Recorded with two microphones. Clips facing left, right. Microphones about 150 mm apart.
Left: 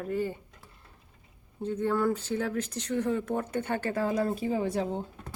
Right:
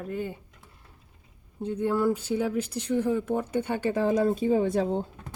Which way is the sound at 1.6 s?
15° right (ahead or behind).